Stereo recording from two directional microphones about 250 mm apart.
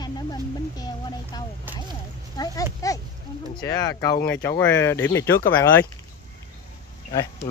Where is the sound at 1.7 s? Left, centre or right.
Centre.